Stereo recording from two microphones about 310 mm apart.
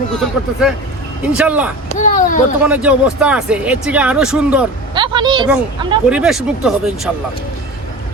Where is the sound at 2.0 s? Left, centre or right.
Left.